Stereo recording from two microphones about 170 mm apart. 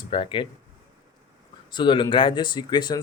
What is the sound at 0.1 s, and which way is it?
Speech, 30° left (ahead or behind).